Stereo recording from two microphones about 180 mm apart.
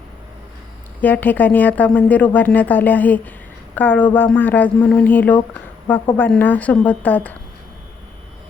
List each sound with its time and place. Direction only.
1.0 s speech: 10° left (ahead or behind)